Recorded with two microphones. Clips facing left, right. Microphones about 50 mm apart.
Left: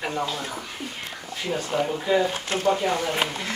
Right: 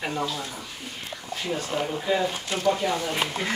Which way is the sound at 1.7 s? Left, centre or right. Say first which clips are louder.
Left 4 dB; centre.